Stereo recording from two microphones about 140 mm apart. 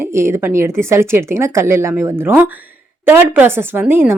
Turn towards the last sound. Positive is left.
turn(degrees=-15)  # may be behind; listen again after turning